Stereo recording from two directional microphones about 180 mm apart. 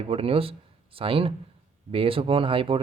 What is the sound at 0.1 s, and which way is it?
Speech, 30° right (ahead or behind).